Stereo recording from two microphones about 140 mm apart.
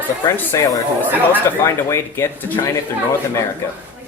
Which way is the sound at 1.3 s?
20° left (ahead or behind).